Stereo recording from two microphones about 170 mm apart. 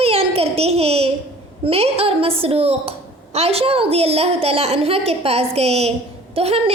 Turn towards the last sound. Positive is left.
turn(degrees=-35)  # may be behind; listen again after turning